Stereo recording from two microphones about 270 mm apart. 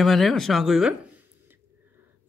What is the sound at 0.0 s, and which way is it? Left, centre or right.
Speech, centre.